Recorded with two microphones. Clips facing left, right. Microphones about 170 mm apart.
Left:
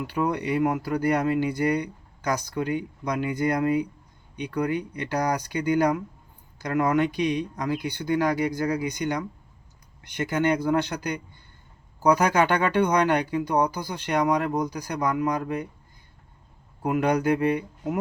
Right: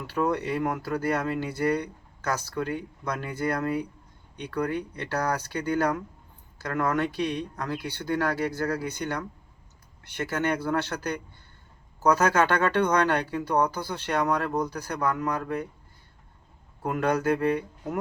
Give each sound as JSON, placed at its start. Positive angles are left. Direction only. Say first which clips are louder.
{"t": 0.1, "sound": "speech", "louder": "even", "side_deg": 15}
{"t": 16.8, "sound": "speech", "louder": "left 2 dB", "side_deg": 15}